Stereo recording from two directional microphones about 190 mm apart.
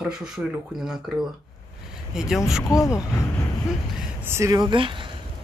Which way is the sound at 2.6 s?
15° left (ahead or behind).